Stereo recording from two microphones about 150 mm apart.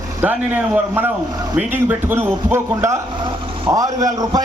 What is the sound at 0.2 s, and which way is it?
A man's voice, 10° right (ahead or behind).